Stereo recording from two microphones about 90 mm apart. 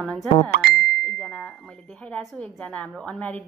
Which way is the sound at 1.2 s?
5° left (ahead or behind).